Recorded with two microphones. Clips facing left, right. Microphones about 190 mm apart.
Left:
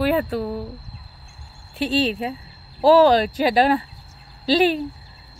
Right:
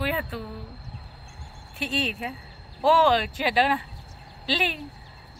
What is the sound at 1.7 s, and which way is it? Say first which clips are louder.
Speech: left 8 dB; 35° left (ahead or behind).